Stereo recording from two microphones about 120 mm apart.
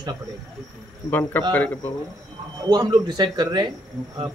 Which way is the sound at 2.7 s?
40° right (ahead or behind).